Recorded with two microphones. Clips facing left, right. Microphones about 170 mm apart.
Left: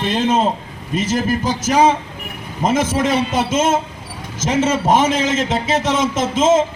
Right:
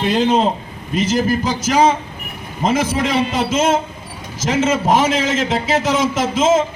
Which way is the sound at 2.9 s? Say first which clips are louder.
Left 1 dB; 45° left (ahead or behind).